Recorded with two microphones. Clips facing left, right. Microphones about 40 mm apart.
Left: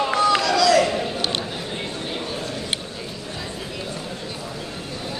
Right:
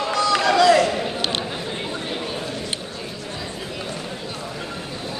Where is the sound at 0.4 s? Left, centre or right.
Right.